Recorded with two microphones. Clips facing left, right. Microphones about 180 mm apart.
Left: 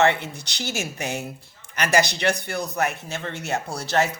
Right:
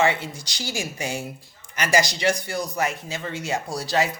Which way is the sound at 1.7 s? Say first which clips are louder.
Left 1 dB; 60° left (ahead or behind).